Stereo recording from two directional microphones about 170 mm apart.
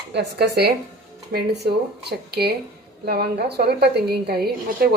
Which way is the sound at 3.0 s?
65° right (ahead or behind).